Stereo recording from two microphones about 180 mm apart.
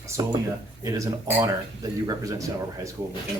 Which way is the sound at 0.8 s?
15° right (ahead or behind).